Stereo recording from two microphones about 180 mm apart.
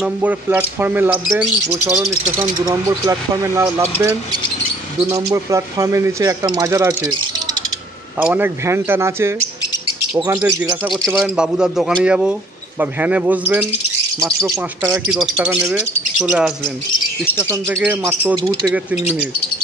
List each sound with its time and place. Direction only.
0.0 s speech: 10° right (ahead or behind)
2.3 s speech: 20° right (ahead or behind)
5.1 s speech: 15° right (ahead or behind)
8.2 s speech: 10° right (ahead or behind)
14.9 s speech: 5° right (ahead or behind)
17.2 s speech: 10° left (ahead or behind)
17.5 s speech: 15° right (ahead or behind)